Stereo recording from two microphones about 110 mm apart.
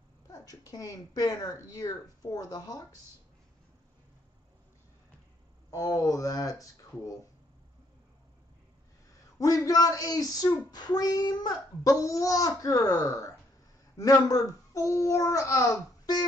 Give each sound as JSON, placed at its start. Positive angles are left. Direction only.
{"t": 0.3, "sound": "speech", "side_deg": 30}
{"t": 5.7, "sound": "speech", "side_deg": 30}
{"t": 9.4, "sound": "a child's voice", "side_deg": 35}